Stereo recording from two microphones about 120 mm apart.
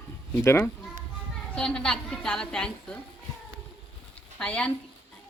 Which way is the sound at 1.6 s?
5° left (ahead or behind).